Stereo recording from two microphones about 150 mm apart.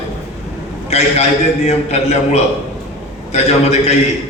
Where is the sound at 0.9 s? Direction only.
45° left (ahead or behind).